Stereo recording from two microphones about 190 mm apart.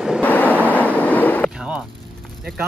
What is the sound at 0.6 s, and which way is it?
Train, 10° left (ahead or behind).